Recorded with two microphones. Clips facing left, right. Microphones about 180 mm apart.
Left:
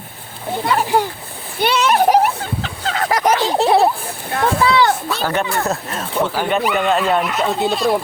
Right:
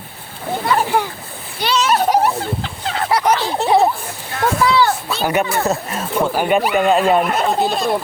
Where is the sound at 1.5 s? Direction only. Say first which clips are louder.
Left 2 dB; 55° left (ahead or behind).